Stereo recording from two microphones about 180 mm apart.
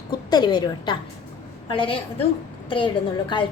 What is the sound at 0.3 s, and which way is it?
A woman's voice, 25° left (ahead or behind).